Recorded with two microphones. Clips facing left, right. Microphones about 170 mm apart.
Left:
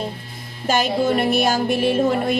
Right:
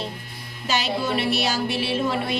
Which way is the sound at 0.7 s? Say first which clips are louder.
Left 6 dB; 50° left (ahead or behind).